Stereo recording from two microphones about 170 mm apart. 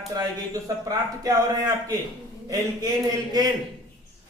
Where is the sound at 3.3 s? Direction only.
25° right (ahead or behind).